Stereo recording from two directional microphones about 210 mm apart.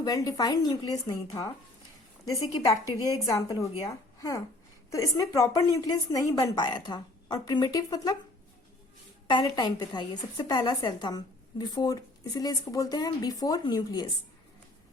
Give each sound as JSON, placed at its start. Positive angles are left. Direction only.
{"t": 0.0, "sound": "a woman's voice", "side_deg": 15}
{"t": 2.8, "sound": "a woman's voice", "side_deg": -15}
{"t": 3.2, "sound": "a woman's voice", "side_deg": 15}
{"t": 9.3, "sound": "a woman's voice", "side_deg": 20}